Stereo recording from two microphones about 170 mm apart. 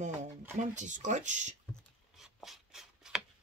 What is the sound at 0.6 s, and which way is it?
Speech, 45° right (ahead or behind).